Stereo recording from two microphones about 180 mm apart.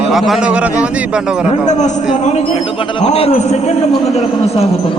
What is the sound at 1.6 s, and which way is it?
A man's voice, 40° left (ahead or behind).